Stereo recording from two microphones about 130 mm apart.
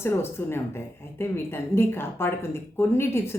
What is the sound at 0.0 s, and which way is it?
A woman's voice, 20° left (ahead or behind).